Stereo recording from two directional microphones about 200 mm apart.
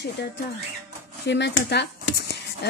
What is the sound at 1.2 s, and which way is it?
Speech, 60° left (ahead or behind).